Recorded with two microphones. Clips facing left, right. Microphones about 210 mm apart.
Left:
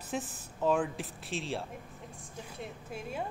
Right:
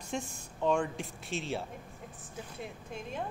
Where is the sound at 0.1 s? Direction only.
5° left (ahead or behind).